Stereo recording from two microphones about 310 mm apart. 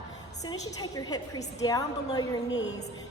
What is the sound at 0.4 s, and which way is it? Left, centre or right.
A woman's voice, centre.